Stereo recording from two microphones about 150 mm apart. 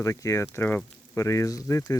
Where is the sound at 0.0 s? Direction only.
20° left (ahead or behind).